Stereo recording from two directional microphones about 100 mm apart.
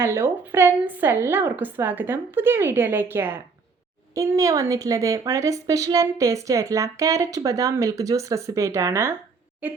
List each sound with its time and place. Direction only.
0.0 s a woman's voice: 25° right (ahead or behind)